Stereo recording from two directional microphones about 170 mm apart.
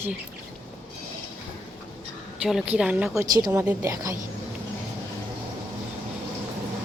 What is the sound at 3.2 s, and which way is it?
Speech, 20° right (ahead or behind).